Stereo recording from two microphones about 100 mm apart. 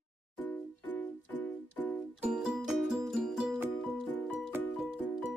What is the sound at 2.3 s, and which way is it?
Music, 5° right (ahead or behind).